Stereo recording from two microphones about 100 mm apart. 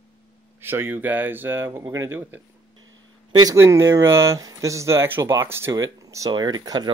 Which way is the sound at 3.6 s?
30° right (ahead or behind).